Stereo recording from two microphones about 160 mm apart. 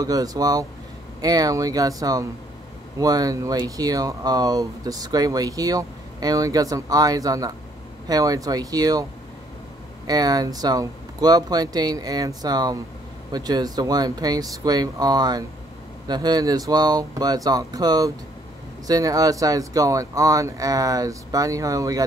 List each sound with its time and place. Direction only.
0.0 s speech: 25° right (ahead or behind)
10.0 s speech: 25° right (ahead or behind)